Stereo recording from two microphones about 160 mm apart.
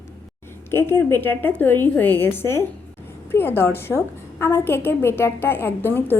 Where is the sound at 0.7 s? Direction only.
15° left (ahead or behind).